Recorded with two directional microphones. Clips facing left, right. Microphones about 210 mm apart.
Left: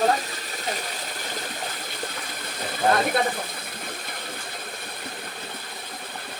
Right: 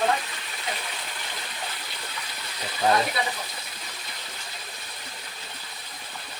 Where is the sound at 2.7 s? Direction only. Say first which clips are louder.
Left 2 dB; 50° left (ahead or behind).